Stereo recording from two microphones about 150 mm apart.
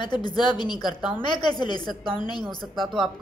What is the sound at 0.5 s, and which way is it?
Speech, 30° left (ahead or behind).